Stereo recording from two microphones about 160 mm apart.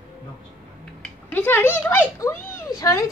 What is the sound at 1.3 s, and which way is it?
A child's voice, 15° left (ahead or behind).